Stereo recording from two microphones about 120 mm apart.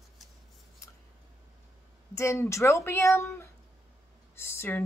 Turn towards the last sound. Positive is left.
turn(degrees=20)  # may be behind; listen again after turning